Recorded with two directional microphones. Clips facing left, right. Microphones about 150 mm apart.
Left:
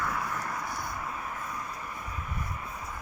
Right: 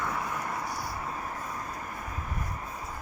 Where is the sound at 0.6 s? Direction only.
35° right (ahead or behind).